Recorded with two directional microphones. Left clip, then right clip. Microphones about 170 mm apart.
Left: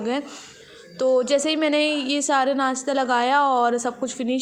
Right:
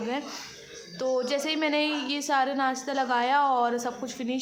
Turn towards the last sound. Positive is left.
turn(degrees=30)  # may be behind; listen again after turning